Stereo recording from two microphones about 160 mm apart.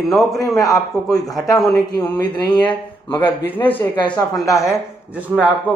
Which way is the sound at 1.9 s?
25° left (ahead or behind).